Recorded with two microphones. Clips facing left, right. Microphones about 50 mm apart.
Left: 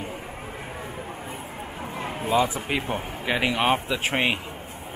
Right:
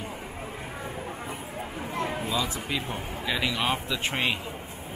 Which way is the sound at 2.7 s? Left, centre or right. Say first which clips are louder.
Left 4 dB; left.